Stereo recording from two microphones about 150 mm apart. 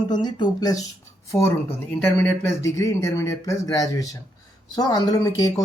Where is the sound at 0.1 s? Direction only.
30° left (ahead or behind).